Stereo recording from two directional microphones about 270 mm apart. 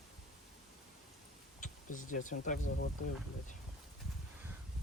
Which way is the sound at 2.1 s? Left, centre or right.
Left.